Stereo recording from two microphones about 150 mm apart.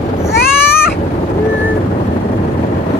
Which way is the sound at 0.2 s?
20° left (ahead or behind).